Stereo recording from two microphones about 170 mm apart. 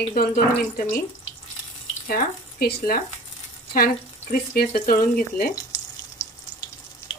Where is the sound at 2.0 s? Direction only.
60° left (ahead or behind).